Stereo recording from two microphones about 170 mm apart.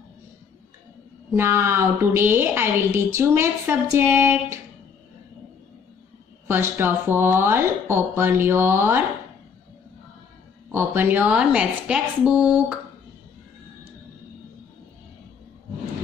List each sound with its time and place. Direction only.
1.3 s a woman's voice: 15° right (ahead or behind)
6.4 s a woman's voice: 15° right (ahead or behind)
10.7 s a woman's voice: 15° right (ahead or behind)